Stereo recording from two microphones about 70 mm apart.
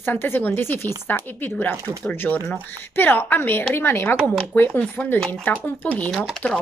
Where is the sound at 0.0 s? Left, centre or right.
Left.